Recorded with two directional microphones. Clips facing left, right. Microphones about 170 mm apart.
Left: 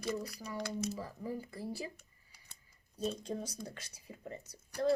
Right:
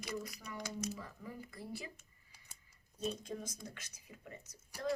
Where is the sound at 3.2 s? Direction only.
35° left (ahead or behind).